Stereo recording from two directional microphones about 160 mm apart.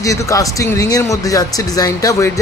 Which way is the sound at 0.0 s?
20° left (ahead or behind).